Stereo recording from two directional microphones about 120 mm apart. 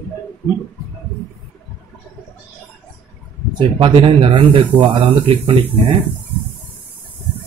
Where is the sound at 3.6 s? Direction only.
45° right (ahead or behind).